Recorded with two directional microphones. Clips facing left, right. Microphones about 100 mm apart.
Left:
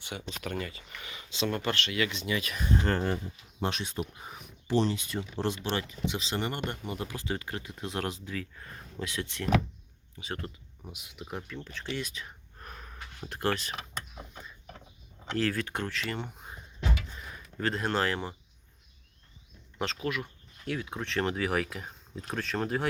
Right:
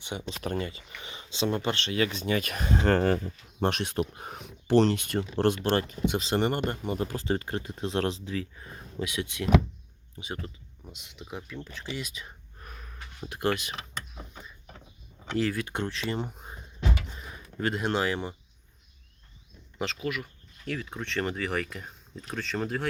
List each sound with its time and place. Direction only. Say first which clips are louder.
0.0 s speech: right 4 dB; 25° right (ahead or behind); by 2.6 s 55° right (ahead or behind)
2.6 s speech: right 5 dB; 90° right
3.6 s speech: right 5 dB; 55° right (ahead or behind)
5.7 s speech: right 6 dB; 50° right (ahead or behind); by 8.4 s 25° right (ahead or behind)
8.5 s speech: right 4 dB; 15° right (ahead or behind)
10.9 s speech: left 1 dB; 5° left (ahead or behind)
12.5 s gasp: left 2 dB; centre (ahead or behind)
15.3 s speech: right 2 dB; 5° right (ahead or behind)
15.6 s speech: right 2 dB; 20° right (ahead or behind)
16.2 s a sound: right 4 dB; 10° right (ahead or behind)
17.6 s speech: right 1 dB; 15° right (ahead or behind)
19.8 s speech: even; centre (ahead or behind)